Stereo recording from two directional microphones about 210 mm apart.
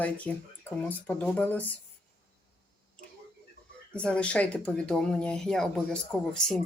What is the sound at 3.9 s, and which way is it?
Speech, 5° left (ahead or behind).